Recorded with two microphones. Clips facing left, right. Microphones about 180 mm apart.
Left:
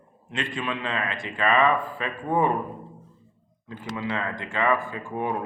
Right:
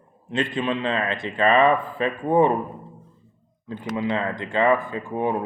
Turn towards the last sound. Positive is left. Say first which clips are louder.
# right 4 dB
turn(degrees=-20)  # may be behind; listen again after turning